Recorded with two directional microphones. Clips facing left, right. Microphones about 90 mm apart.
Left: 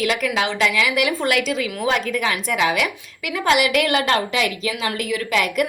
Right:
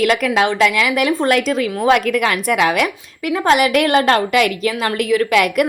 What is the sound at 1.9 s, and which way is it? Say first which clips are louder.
A woman's voice: right 7 dB; 60° right (ahead or behind).